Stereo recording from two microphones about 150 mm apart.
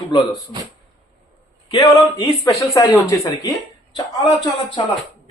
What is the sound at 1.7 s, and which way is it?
Speech, 25° left (ahead or behind).